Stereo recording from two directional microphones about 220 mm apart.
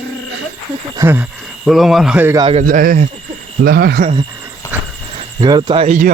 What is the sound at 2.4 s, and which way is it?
Speech, 25° right (ahead or behind).